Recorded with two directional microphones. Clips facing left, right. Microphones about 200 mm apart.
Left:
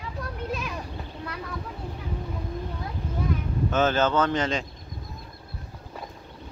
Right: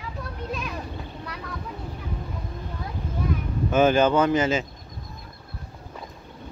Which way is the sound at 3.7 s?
10° right (ahead or behind).